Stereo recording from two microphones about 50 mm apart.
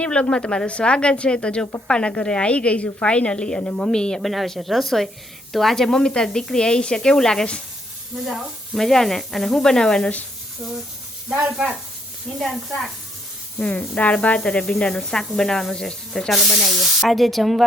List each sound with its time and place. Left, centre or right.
0.0 s a woman's voice: left
4.2 s speech: centre
8.1 s speech: centre
10.6 s speech: centre
11.3 s speech: right
12.4 s speech: centre
13.6 s a woman's voice: left
16.3 s speech: centre